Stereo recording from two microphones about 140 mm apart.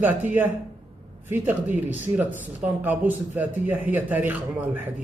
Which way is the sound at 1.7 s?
10° right (ahead or behind).